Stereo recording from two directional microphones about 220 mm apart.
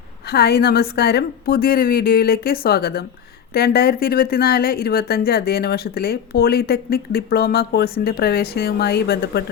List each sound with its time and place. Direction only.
0.3 s speech: 45° left (ahead or behind)